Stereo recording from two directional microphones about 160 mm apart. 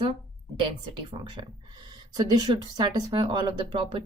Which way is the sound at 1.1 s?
30° right (ahead or behind).